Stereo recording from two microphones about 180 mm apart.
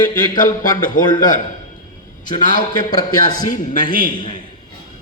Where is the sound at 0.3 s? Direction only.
50° left (ahead or behind).